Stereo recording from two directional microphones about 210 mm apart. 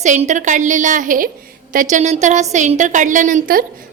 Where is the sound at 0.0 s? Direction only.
35° right (ahead or behind).